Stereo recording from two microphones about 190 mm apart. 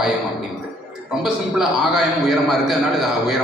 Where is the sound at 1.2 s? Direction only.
5° right (ahead or behind).